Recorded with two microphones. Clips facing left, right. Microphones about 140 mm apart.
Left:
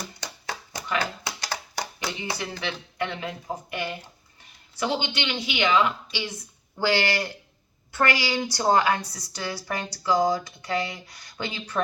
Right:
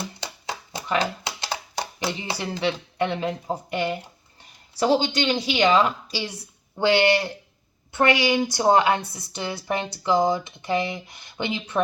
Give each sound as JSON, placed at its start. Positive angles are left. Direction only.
{"t": 0.4, "sound": "a sound", "side_deg": -25}
{"t": 2.4, "sound": "a woman's voice", "side_deg": -25}
{"t": 4.8, "sound": "a woman's voice", "side_deg": -35}
{"t": 6.7, "sound": "a woman's voice", "side_deg": -25}